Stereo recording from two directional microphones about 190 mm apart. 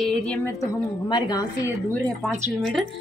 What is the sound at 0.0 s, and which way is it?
Speech, 5° left (ahead or behind).